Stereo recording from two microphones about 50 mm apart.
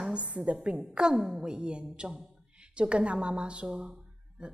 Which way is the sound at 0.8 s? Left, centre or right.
Centre.